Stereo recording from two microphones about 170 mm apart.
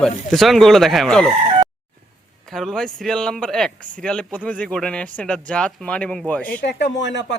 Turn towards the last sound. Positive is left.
turn(degrees=90)